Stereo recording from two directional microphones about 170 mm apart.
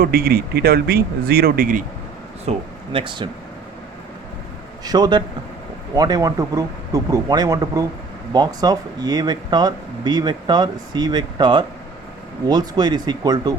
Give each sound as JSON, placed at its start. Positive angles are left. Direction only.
{"t": 0.0, "sound": "speech", "side_deg": -60}
{"t": 2.5, "sound": "speech", "side_deg": -30}
{"t": 4.9, "sound": "speech", "side_deg": -25}